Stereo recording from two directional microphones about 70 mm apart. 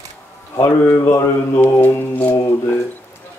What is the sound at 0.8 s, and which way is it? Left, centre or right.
Mantra, left.